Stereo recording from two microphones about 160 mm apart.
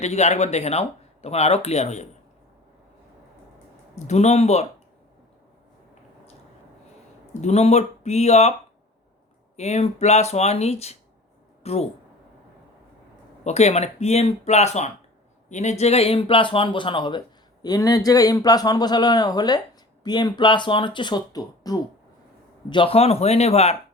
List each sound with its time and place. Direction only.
0.0 s speech: 45° left (ahead or behind)
3.9 s speech: 45° left (ahead or behind)
7.4 s speech: 45° left (ahead or behind)
9.6 s speech: 45° left (ahead or behind)
13.4 s speech: 40° left (ahead or behind); by 21.8 s 25° left (ahead or behind)
22.7 s speech: 35° left (ahead or behind)